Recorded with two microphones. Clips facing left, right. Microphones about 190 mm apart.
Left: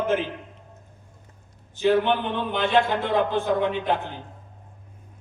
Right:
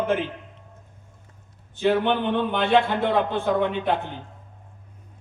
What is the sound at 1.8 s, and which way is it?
A man's voice, 60° right (ahead or behind).